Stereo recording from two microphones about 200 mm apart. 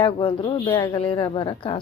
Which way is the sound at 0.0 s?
25° left (ahead or behind).